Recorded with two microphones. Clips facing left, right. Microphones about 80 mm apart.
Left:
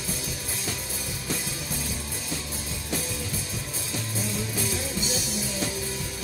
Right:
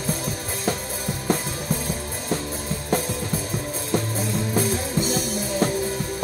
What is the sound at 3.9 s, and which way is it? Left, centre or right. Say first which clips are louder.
Music: right 7 dB; right.